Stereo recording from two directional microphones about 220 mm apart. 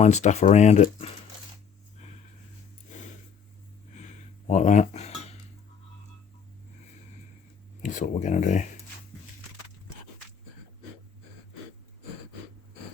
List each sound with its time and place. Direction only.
0.0 s speech: 30° left (ahead or behind)
2.9 s a sound: 35° left (ahead or behind)
7.8 s speech: 35° left (ahead or behind)